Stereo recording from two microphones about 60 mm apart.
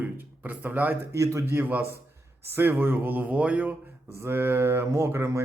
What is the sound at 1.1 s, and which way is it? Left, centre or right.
Speech, right.